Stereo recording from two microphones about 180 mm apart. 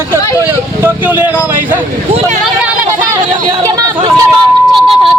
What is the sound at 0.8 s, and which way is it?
Speech, 10° right (ahead or behind).